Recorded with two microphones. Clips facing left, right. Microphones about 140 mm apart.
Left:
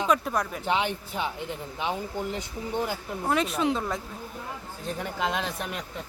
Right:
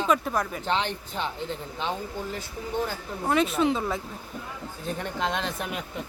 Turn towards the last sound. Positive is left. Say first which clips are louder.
# right 1 dB
turn(degrees=-5)  # may be behind; listen again after turning